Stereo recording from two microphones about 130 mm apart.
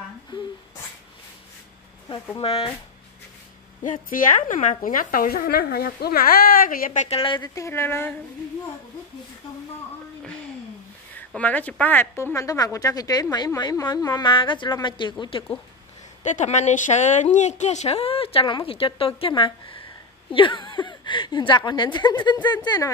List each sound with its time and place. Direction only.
2.4 s a woman's voice: 50° left (ahead or behind)
3.8 s speech: 90° left
6.5 s speech: 90° left
7.2 s a woman's voice: 30° left (ahead or behind)
11.3 s a woman's voice: 10° left (ahead or behind); by 15.4 s 40° left (ahead or behind)
16.2 s a woman's voice: 70° left (ahead or behind); by 22.8 s 35° left (ahead or behind)